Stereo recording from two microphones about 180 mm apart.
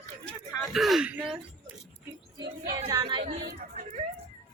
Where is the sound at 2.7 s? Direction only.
20° right (ahead or behind).